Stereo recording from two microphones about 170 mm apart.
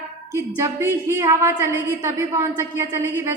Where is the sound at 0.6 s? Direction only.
15° right (ahead or behind).